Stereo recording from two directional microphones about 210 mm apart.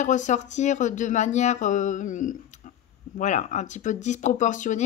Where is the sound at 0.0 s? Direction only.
35° left (ahead or behind).